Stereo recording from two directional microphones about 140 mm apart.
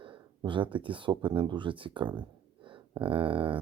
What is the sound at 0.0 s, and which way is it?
Speech, 35° right (ahead or behind).